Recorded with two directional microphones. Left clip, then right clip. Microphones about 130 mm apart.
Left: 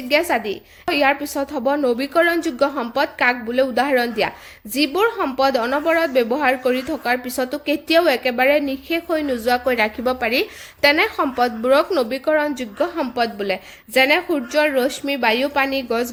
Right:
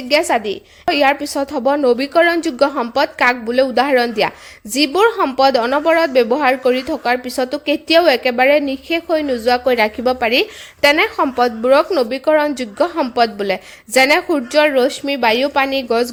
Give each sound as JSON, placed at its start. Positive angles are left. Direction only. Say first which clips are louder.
{"t": 0.1, "sound": "a woman's voice", "louder": "right 3 dB", "side_deg": -35}